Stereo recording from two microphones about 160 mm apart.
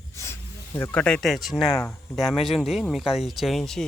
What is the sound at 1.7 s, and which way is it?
Speech, 15° left (ahead or behind).